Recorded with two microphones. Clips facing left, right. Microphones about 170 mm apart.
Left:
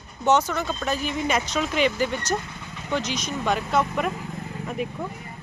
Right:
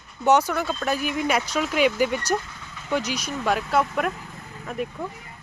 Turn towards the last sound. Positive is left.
turn(degrees=0)  # may be behind; listen again after turning